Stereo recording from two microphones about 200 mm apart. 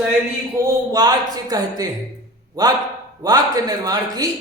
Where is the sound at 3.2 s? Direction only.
20° right (ahead or behind).